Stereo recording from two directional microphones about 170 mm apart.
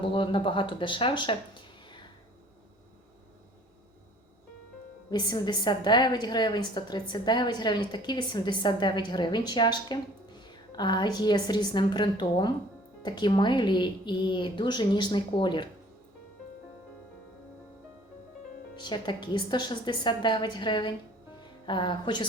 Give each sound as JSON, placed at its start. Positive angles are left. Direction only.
{"t": 0.0, "sound": "speech", "side_deg": 30}
{"t": 5.1, "sound": "a woman's voice", "side_deg": 25}
{"t": 18.8, "sound": "a woman's voice", "side_deg": 25}